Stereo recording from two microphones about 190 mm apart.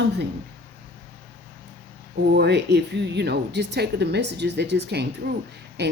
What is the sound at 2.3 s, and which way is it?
Speech, 60° right (ahead or behind).